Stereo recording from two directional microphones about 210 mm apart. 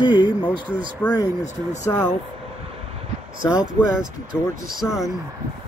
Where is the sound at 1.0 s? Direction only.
10° left (ahead or behind).